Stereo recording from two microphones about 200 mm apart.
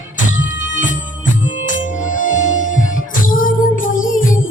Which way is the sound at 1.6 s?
40° left (ahead or behind).